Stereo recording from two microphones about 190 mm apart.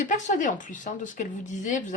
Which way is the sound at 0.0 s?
40° left (ahead or behind).